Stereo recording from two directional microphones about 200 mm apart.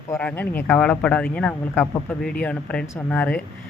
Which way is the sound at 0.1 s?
10° left (ahead or behind).